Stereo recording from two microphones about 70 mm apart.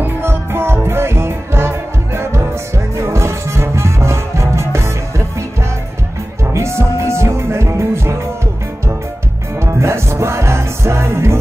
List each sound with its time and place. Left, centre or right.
0.0 s music: right
6.5 s music: right
9.6 s music: right